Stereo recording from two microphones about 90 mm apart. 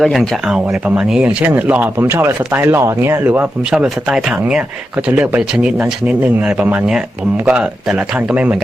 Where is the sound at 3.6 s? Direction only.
10° right (ahead or behind).